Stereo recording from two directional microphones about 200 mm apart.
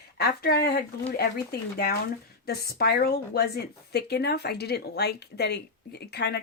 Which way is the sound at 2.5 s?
50° left (ahead or behind).